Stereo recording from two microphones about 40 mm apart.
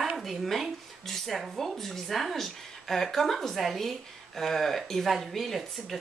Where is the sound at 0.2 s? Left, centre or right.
Centre.